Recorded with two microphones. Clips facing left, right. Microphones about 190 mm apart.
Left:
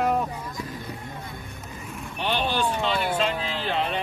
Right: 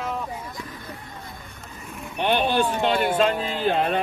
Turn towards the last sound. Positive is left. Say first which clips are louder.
# right 5 dB
turn(degrees=-45)  # may be behind; listen again after turning